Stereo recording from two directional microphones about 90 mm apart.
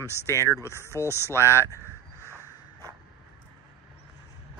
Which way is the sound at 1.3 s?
30° left (ahead or behind).